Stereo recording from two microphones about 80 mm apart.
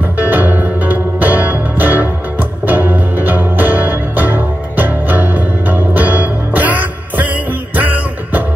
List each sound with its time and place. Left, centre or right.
0.3 s music: right